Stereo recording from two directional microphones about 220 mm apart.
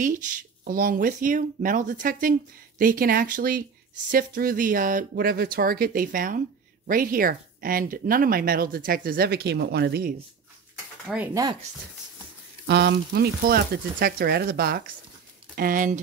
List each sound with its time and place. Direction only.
0.0 s speech: 35° right (ahead or behind)
11.1 s speech: centre (ahead or behind)
12.6 s speech: 50° right (ahead or behind)